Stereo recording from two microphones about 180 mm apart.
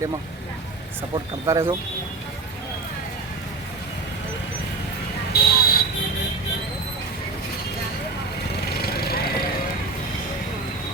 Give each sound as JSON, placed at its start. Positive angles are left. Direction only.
{"t": 1.1, "sound": "speech", "side_deg": -15}
{"t": 5.3, "sound": "buzzer", "side_deg": 60}
{"t": 8.8, "sound": "vehicle", "side_deg": 60}